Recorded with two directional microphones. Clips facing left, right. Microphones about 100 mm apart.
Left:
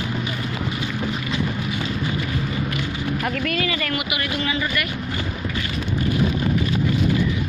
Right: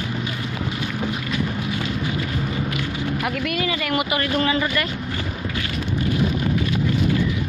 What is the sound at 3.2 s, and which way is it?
Speech, 10° right (ahead or behind).